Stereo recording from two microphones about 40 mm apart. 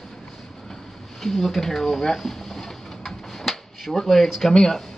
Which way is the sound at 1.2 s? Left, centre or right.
Centre.